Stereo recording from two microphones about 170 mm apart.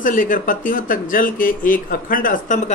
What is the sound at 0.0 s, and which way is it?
Speech, 50° left (ahead or behind).